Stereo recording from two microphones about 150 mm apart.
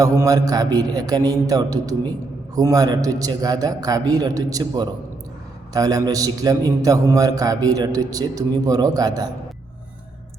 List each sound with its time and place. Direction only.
0.0 s a man's voice: 20° right (ahead or behind)